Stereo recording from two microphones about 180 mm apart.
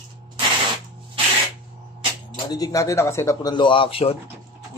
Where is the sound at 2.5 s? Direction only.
20° left (ahead or behind).